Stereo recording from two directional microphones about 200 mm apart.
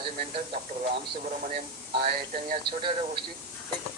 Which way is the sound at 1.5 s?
45° right (ahead or behind).